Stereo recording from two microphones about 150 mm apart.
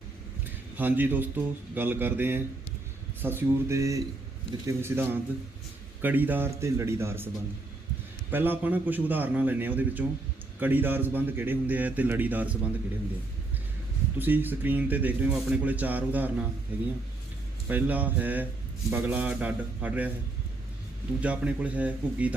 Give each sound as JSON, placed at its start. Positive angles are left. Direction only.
{"t": 0.8, "sound": "speech", "side_deg": -10}
{"t": 8.3, "sound": "speech", "side_deg": -15}
{"t": 14.2, "sound": "speech", "side_deg": -10}
{"t": 21.2, "sound": "speech", "side_deg": -10}